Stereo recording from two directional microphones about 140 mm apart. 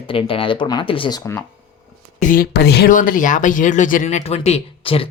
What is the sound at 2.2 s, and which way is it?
Speech, 80° left.